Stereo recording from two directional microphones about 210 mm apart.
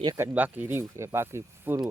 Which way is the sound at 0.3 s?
10° right (ahead or behind).